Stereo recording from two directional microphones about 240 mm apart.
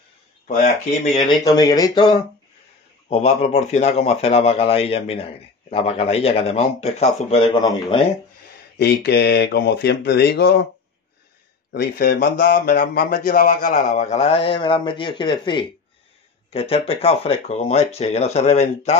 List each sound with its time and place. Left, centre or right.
1.4 s a man's voice: centre
8.7 s speech: left
11.7 s a man's voice: left